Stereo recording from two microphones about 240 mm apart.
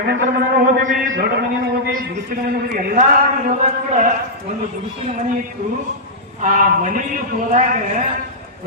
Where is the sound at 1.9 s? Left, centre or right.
Right.